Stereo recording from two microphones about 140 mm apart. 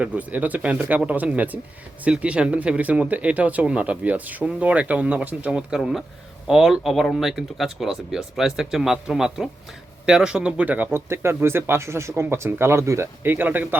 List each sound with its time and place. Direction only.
0.0 s speech: 10° right (ahead or behind)